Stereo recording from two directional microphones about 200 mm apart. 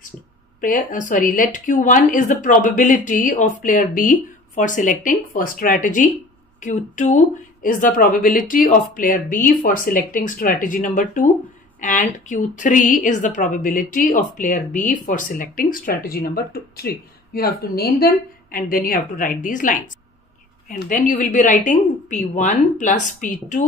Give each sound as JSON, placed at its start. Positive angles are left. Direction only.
{"t": 0.6, "sound": "a woman's voice", "side_deg": 40}